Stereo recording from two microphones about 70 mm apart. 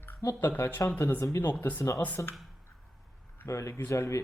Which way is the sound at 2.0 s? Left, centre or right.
Left.